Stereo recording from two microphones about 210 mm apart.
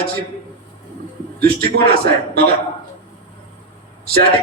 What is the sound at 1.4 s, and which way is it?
A man's voice, 50° right (ahead or behind).